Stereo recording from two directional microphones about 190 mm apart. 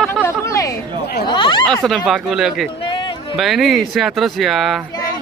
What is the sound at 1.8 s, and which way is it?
Speech, centre (ahead or behind).